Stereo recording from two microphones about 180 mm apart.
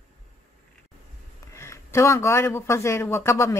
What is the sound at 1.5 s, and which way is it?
Speech, 15° left (ahead or behind).